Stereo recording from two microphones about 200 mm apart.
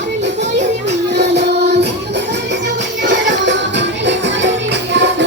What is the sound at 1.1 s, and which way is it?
Music, 60° right (ahead or behind).